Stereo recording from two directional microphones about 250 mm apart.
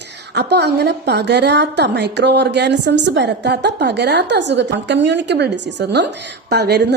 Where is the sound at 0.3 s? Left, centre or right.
Right.